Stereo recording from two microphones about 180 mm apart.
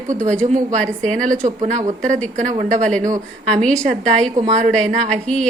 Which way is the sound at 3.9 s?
40° right (ahead or behind).